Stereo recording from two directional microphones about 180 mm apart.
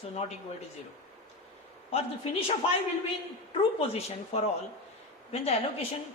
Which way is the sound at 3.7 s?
35° left (ahead or behind).